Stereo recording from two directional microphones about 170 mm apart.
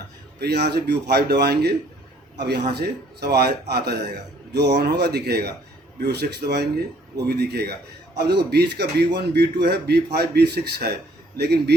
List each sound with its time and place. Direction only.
0.3 s a man's voice: 70° right (ahead or behind)